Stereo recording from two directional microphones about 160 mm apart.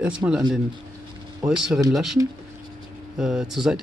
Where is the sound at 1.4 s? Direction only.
5° right (ahead or behind).